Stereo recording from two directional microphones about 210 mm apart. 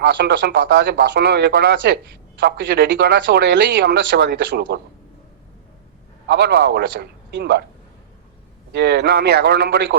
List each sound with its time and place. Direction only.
0.0 s speech: 55° right (ahead or behind)
6.2 s speech: 55° right (ahead or behind)
8.7 s speech: 55° right (ahead or behind)